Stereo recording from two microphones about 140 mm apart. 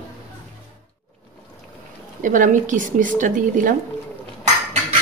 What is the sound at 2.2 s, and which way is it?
A woman's voice, 70° right (ahead or behind).